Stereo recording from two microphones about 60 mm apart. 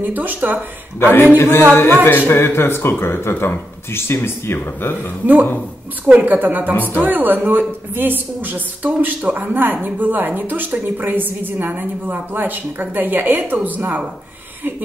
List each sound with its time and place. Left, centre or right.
0.0 s a woman's voice: right
1.1 s speech: left
5.2 s a woman's voice: right
6.7 s speech: left
7.0 s a woman's voice: right